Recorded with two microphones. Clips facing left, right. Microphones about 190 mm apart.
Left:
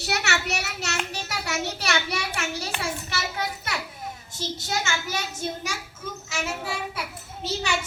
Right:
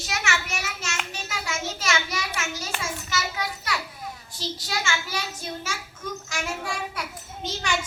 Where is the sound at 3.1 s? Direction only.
25° left (ahead or behind).